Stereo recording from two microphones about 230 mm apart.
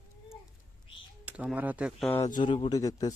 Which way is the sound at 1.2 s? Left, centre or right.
Centre.